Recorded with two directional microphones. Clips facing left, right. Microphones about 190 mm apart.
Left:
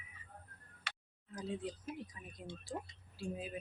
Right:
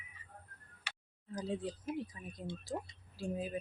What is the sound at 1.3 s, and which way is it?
Speech, 35° right (ahead or behind).